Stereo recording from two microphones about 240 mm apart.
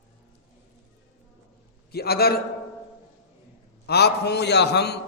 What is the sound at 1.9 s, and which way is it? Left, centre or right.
Speech, left.